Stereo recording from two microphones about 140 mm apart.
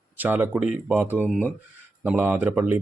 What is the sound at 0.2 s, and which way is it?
Speech, 15° right (ahead or behind).